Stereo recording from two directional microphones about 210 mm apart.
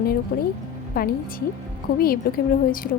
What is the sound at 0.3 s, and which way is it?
Speech, 45° left (ahead or behind).